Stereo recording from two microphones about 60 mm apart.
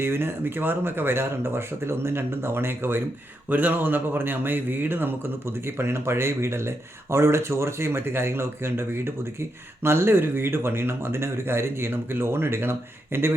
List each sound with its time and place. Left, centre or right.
0.0 s speech: right